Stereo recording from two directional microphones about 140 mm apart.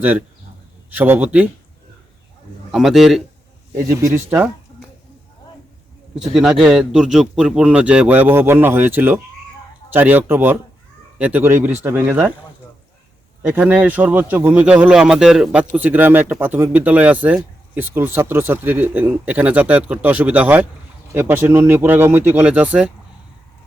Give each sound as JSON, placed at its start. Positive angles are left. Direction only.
{"t": 0.9, "sound": "speech", "side_deg": -15}
{"t": 2.7, "sound": "a man's voice", "side_deg": 0}
{"t": 4.0, "sound": "speech", "side_deg": -15}
{"t": 6.1, "sound": "speech", "side_deg": -5}
{"t": 13.4, "sound": "speech", "side_deg": -10}